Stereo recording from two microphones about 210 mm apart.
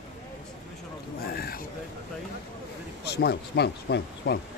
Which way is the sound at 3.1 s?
50° left (ahead or behind).